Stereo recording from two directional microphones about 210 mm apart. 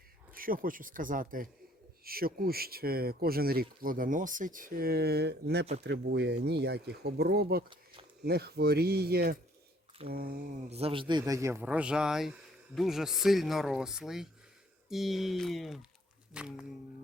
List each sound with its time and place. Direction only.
0.3 s speech: 40° right (ahead or behind)
10.6 s a man's voice: 30° right (ahead or behind)
11.2 s speech: 15° right (ahead or behind)